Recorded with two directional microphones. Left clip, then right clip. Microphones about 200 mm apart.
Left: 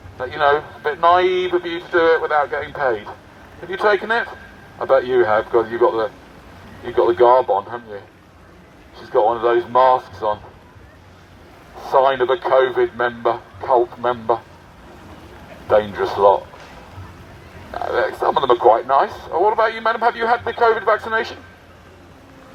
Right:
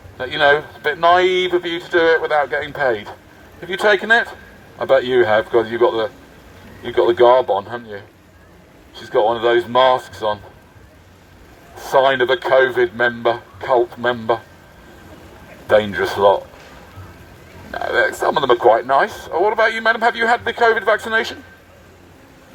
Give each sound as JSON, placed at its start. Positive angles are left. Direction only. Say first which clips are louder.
{"t": 0.2, "sound": "speech", "louder": "right 2 dB", "side_deg": -20}
{"t": 9.1, "sound": "speech", "louder": "right 1 dB", "side_deg": -20}
{"t": 11.8, "sound": "speech", "louder": "right 1 dB", "side_deg": -15}
{"t": 15.6, "sound": "speech", "louder": "right 1 dB", "side_deg": -15}
{"t": 17.7, "sound": "speech", "louder": "right 3 dB", "side_deg": -20}